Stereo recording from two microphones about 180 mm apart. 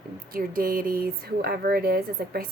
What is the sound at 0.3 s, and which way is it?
A woman's voice, 55° right (ahead or behind).